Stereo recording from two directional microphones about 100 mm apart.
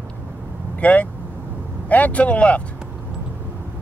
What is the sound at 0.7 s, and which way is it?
Speech, 15° left (ahead or behind).